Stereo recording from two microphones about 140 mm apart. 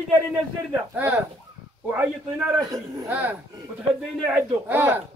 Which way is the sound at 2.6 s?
25° right (ahead or behind).